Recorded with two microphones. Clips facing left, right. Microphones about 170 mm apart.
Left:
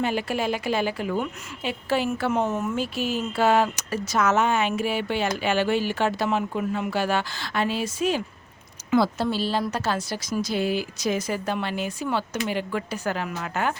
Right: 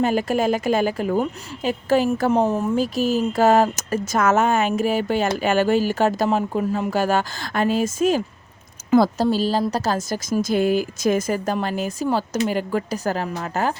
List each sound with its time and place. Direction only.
0.0 s a woman's voice: 45° right (ahead or behind)